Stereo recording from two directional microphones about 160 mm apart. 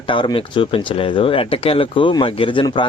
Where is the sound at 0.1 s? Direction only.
30° left (ahead or behind).